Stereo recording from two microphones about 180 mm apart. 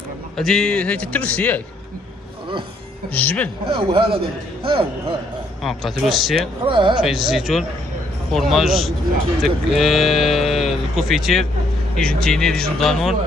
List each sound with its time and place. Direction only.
0.4 s a man's voice: 5° left (ahead or behind)
3.1 s a man's voice: 10° left (ahead or behind)
3.7 s a man's voice: 30° right (ahead or behind)
5.6 s speech: centre (ahead or behind)
6.6 s a man's voice: 25° right (ahead or behind)
7.0 s speech: centre (ahead or behind)